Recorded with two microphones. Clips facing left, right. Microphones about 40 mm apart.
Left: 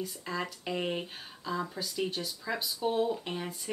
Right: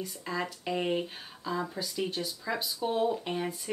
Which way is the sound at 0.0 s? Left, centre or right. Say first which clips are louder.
Right 1 dB; centre.